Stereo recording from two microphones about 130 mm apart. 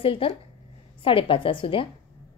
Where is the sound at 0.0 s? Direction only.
45° left (ahead or behind).